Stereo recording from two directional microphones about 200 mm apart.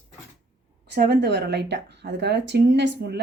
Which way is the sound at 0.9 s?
55° right (ahead or behind).